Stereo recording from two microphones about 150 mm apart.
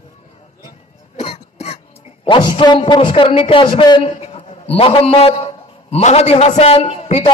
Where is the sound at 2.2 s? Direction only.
35° left (ahead or behind).